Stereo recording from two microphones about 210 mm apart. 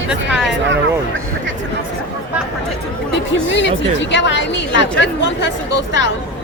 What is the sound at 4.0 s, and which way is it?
A woman's voice, 60° left (ahead or behind).